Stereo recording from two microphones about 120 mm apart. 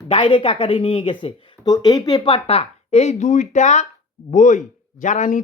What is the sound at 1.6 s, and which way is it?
Speech, 35° left (ahead or behind).